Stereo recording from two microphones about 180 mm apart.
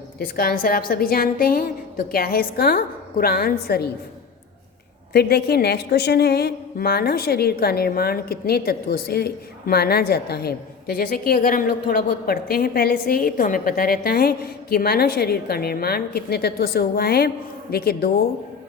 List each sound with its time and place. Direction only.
0.2 s a woman's voice: 55° left (ahead or behind)
5.1 s a woman's voice: 60° left (ahead or behind)